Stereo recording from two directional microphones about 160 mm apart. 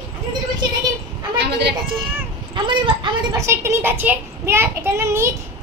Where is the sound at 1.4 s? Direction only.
90° right.